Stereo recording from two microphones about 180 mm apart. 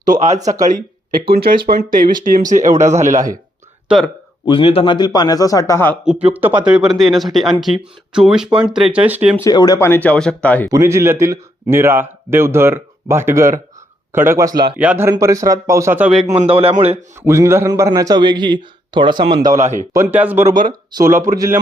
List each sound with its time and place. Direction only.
0.0 s a man's voice: 40° right (ahead or behind)
1.3 s speech: 55° right (ahead or behind)
3.8 s speech: centre (ahead or behind)
4.4 s a man's voice: 30° left (ahead or behind); by 6.0 s 15° left (ahead or behind)
6.1 s speech: 10° right (ahead or behind)
9.4 s speech: 20° left (ahead or behind)
10.7 s a man's voice: 15° right (ahead or behind)
16.3 s a man's voice: 30° right (ahead or behind)
17.2 s a man's voice: 15° right (ahead or behind)
19.5 s speech: 45° right (ahead or behind)
19.9 s speech: 15° right (ahead or behind)